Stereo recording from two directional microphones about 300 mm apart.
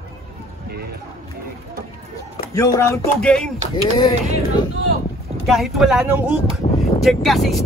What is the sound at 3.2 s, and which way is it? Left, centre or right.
Speech, centre.